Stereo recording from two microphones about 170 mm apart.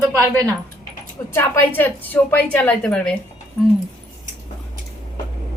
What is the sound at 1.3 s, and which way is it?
A woman's voice, 15° left (ahead or behind).